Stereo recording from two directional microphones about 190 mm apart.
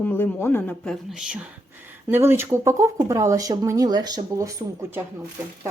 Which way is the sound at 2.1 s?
10° right (ahead or behind).